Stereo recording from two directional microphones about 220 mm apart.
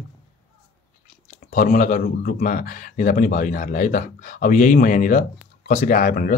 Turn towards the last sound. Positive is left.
turn(degrees=35)  # may be behind; listen again after turning